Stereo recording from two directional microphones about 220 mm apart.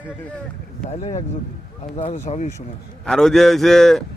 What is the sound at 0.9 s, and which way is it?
Speech, 30° left (ahead or behind).